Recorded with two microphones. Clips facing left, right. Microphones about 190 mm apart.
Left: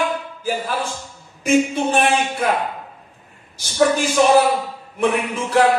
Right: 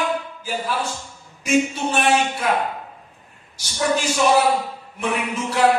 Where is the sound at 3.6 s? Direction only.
55° left (ahead or behind).